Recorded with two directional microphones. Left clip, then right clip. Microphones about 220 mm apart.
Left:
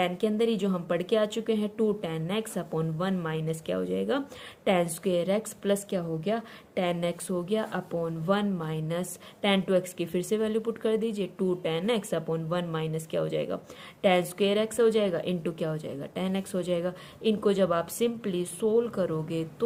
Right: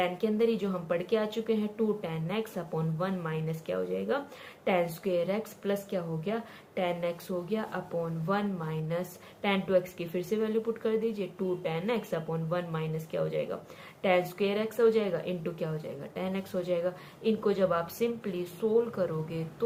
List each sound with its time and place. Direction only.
0.0 s a woman's voice: 45° left (ahead or behind)